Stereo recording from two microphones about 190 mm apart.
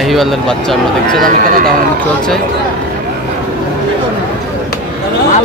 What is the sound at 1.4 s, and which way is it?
Speech, 45° right (ahead or behind).